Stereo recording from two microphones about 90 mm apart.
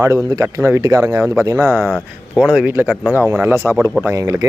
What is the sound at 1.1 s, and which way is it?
Speech, 25° right (ahead or behind).